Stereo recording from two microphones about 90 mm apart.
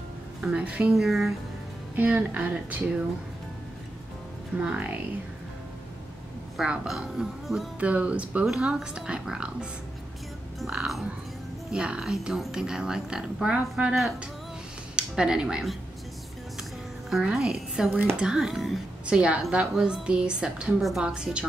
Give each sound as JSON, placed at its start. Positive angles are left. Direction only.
{"t": 0.4, "sound": "a woman's voice", "side_deg": -10}
{"t": 0.9, "sound": "a woman's voice", "side_deg": 0}
{"t": 2.0, "sound": "a woman's voice", "side_deg": -15}
{"t": 4.6, "sound": "a woman's voice", "side_deg": -15}
{"t": 6.5, "sound": "a woman's voice", "side_deg": -10}
{"t": 7.8, "sound": "a woman's voice", "side_deg": -15}
{"t": 17.1, "sound": "a woman's voice", "side_deg": -5}
{"t": 19.1, "sound": "a woman's voice", "side_deg": -10}